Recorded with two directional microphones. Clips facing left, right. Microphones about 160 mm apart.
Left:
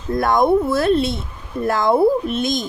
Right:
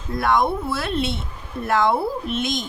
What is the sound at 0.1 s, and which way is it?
A woman's voice, 45° left (ahead or behind).